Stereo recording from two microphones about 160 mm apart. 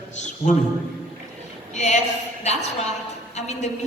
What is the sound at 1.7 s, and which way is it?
A woman's voice, 50° left (ahead or behind).